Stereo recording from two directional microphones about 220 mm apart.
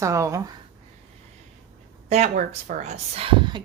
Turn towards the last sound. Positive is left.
turn(degrees=-20)  # may be behind; listen again after turning